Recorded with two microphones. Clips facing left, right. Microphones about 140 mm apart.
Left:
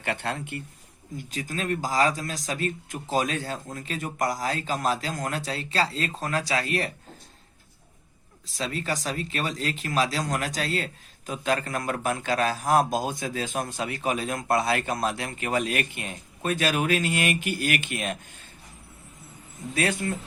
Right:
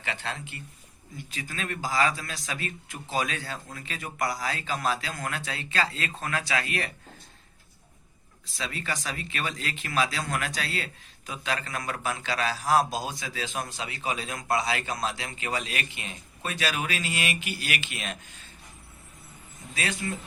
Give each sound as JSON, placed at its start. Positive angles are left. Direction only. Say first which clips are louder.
{"t": 0.0, "sound": "speech", "louder": "left 5 dB", "side_deg": 55}
{"t": 1.1, "sound": "a man's voice", "louder": "left 5 dB", "side_deg": 40}
{"t": 8.4, "sound": "a man's voice", "louder": "left 4 dB", "side_deg": 40}
{"t": 19.7, "sound": "speech", "louder": "left 5 dB", "side_deg": 55}